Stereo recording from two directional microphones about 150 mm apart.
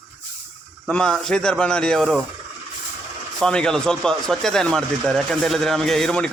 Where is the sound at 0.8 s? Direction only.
5° left (ahead or behind).